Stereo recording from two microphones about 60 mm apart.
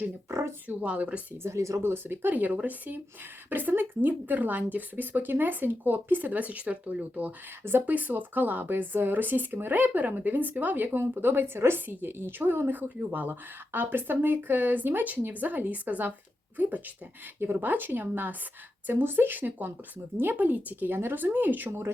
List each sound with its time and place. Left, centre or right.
0.3 s a sound: right
0.8 s speech: right
1.4 s speech: right
1.8 s speech: right
2.3 s speech: right
7.6 s speech: right
7.9 s speech: right